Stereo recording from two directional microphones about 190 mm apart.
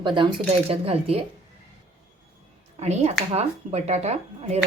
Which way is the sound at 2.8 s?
35° right (ahead or behind).